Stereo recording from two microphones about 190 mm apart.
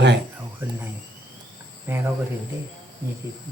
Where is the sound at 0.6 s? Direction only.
10° right (ahead or behind).